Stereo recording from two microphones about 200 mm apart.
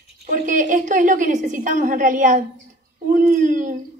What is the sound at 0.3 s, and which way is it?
A woman's voice, 40° right (ahead or behind).